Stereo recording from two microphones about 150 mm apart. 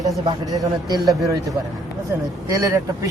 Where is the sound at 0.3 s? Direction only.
25° right (ahead or behind).